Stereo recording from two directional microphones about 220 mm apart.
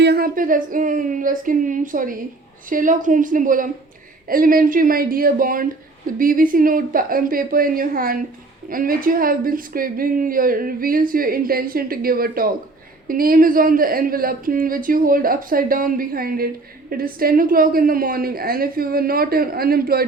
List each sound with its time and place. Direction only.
0.0 s a woman's voice: 45° right (ahead or behind)